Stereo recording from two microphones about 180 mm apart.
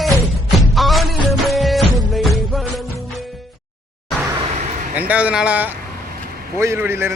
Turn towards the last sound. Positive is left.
turn(degrees=-15)  # may be behind; listen again after turning